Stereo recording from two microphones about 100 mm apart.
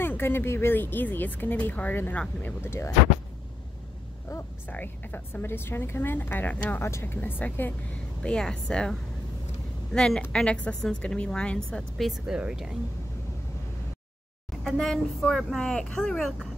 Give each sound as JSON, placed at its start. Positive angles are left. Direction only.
{"t": 0.0, "sound": "speech", "side_deg": 20}
{"t": 4.6, "sound": "speech", "side_deg": 20}
{"t": 8.2, "sound": "speech", "side_deg": 5}
{"t": 9.9, "sound": "a woman's voice", "side_deg": 5}
{"t": 12.1, "sound": "speech", "side_deg": -10}
{"t": 14.6, "sound": "speech", "side_deg": 0}